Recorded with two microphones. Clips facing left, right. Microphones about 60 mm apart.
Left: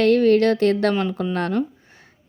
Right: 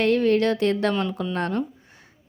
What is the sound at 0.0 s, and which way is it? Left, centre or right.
Speech, left.